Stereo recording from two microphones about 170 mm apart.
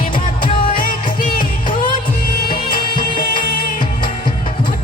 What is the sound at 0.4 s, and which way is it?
Music, 55° left (ahead or behind).